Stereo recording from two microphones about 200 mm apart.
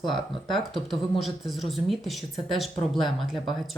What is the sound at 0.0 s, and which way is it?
Speech, 20° left (ahead or behind).